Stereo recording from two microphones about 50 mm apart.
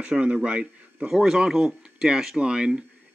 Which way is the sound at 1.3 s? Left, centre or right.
Centre.